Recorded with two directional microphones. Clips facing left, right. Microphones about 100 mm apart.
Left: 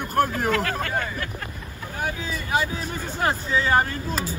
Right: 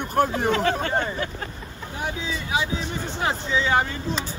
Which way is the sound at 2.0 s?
45° left (ahead or behind).